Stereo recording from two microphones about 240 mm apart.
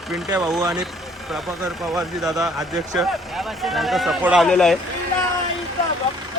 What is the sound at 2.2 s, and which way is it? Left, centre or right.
Speech, centre.